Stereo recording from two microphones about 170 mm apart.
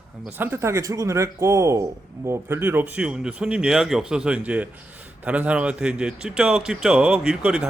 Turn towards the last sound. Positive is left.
turn(degrees=-5)  # may be behind; listen again after turning